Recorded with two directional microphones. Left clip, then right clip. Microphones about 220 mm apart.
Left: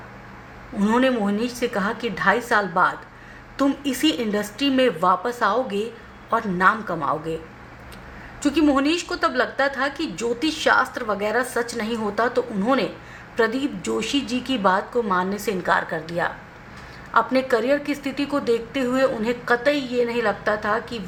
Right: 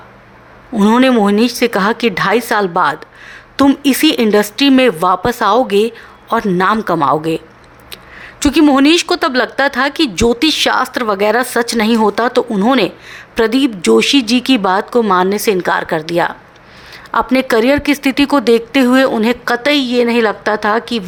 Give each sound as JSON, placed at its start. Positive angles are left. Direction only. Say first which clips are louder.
{"t": 0.8, "sound": "speech", "louder": "right 10 dB", "side_deg": -45}
{"t": 8.4, "sound": "speech", "louder": "right 9 dB", "side_deg": -45}